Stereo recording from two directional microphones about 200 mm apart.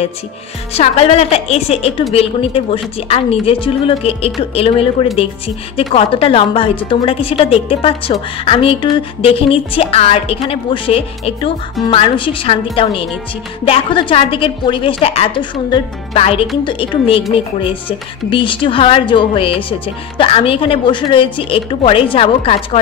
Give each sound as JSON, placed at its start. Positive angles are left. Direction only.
{"t": 0.7, "sound": "a woman's voice", "side_deg": 30}